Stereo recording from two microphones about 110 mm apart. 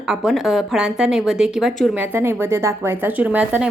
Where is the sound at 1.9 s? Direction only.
20° right (ahead or behind).